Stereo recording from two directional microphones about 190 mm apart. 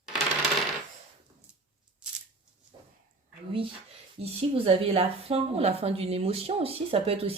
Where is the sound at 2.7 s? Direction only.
20° right (ahead or behind).